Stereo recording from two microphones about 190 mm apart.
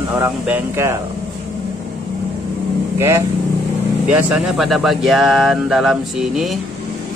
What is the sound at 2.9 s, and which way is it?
Speech, 15° right (ahead or behind).